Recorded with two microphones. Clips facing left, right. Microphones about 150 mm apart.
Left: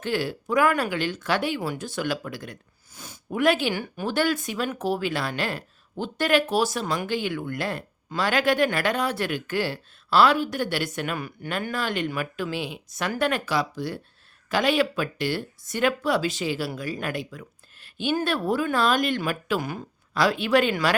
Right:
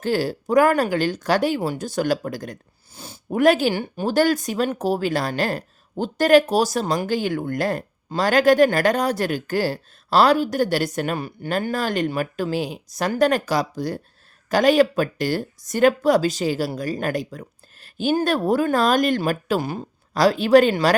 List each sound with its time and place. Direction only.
0.0 s speech: 40° right (ahead or behind)